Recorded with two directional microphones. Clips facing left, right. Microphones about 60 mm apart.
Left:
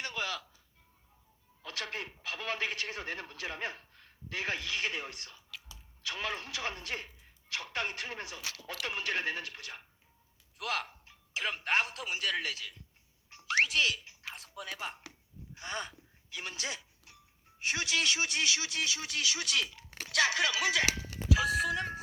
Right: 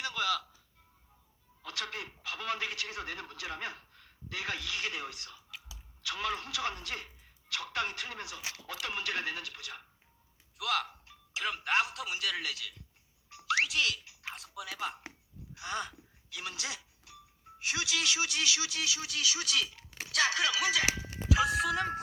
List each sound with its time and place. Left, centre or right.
0.1 s music: left
1.6 s a man's voice: left
5.5 s a sound: centre
6.0 s a man's voice: left
8.4 s speech: centre
8.8 s a man's voice: left
13.5 s a sound: left
14.3 s a man's voice: left
15.5 s crow: left
16.3 s a man's voice: left
21.3 s speech: centre